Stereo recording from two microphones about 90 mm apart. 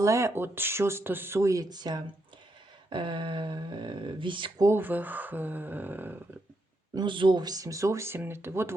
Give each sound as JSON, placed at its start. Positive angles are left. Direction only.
{"t": 0.0, "sound": "speech", "side_deg": -35}
{"t": 2.9, "sound": "speech", "side_deg": -60}
{"t": 4.7, "sound": "speech", "side_deg": -20}
{"t": 6.9, "sound": "speech", "side_deg": -60}